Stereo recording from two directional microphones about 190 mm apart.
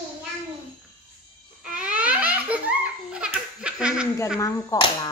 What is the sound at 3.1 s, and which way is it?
Laughter, 5° right (ahead or behind).